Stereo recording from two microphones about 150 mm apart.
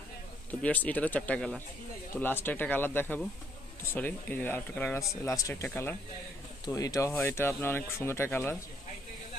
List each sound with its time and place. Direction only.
0.5 s speech: 10° left (ahead or behind)